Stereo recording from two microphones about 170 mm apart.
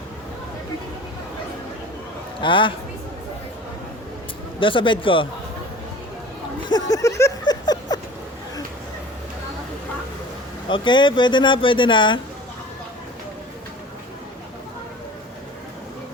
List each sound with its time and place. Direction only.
2.4 s speech: 30° left (ahead or behind)
4.6 s speech: 30° left (ahead or behind)
6.7 s a sound: 25° left (ahead or behind)
10.7 s speech: 30° left (ahead or behind)